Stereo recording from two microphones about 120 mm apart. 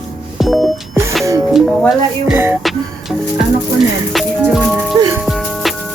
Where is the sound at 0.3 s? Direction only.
Centre (ahead or behind).